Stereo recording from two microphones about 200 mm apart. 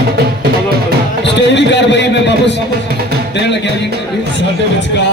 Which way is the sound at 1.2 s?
60° left (ahead or behind).